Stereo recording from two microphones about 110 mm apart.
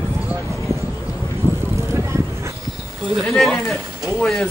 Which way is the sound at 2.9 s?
Centre (ahead or behind).